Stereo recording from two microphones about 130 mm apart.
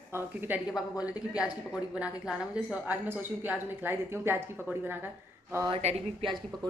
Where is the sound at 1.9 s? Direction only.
10° right (ahead or behind).